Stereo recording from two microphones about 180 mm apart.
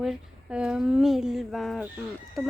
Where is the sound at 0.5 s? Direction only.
5° right (ahead or behind).